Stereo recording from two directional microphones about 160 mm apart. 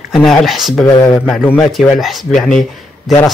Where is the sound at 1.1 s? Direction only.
5° left (ahead or behind).